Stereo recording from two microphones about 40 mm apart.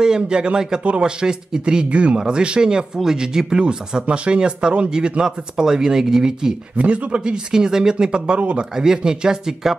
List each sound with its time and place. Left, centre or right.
0.0 s speech: centre
1.9 s speech: right; by 6.5 s centre
6.8 s speech: right
7.5 s speech: centre
8.4 s a man's voice: right
8.7 s speech: centre